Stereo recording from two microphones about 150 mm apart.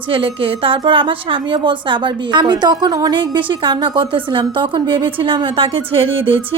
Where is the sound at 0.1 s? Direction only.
35° right (ahead or behind).